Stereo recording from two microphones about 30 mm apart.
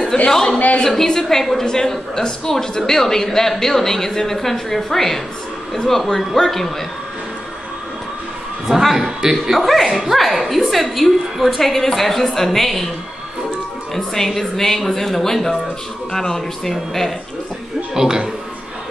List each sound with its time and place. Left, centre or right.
0.3 s a woman's voice: centre
8.9 s a man's voice: centre
13.9 s a woman's voice: centre
17.9 s speech: centre